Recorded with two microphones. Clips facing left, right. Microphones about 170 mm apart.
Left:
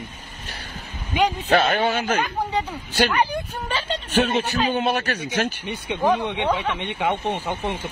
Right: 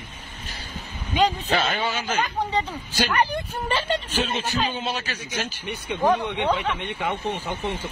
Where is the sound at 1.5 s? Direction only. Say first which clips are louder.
Left 5 dB; 60° left (ahead or behind).